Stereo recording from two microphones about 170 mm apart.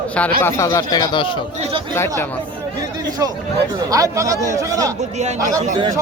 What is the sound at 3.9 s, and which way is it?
Speech, 20° right (ahead or behind).